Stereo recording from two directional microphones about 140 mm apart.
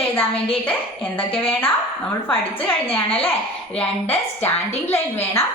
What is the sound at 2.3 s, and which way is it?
Speech, 40° left (ahead or behind).